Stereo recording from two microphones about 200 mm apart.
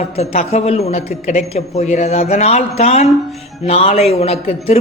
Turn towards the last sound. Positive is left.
turn(degrees=30)  # may be behind; listen again after turning